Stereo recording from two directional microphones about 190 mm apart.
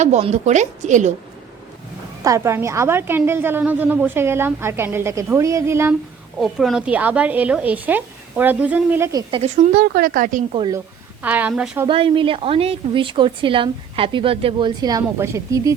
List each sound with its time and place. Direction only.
0.0 s a woman's voice: 35° right (ahead or behind)
2.2 s a woman's voice: 15° right (ahead or behind)
6.4 s a woman's voice: centre (ahead or behind)
9.3 s a woman's voice: 35° right (ahead or behind)
9.7 s speech: 50° right (ahead or behind)
11.2 s a woman's voice: 10° right (ahead or behind)
11.9 s a woman's voice: 25° right (ahead or behind)